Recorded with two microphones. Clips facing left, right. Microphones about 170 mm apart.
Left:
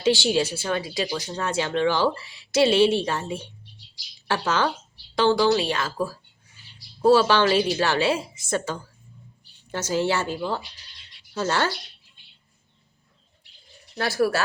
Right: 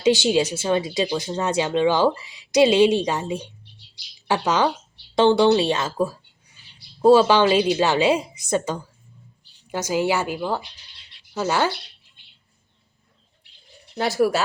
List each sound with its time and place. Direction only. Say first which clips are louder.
0.0 s a woman's voice: right 3 dB; 20° right (ahead or behind)
13.9 s a woman's voice: right 3 dB; 20° right (ahead or behind)